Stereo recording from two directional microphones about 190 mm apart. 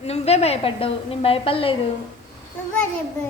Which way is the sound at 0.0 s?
35° left (ahead or behind).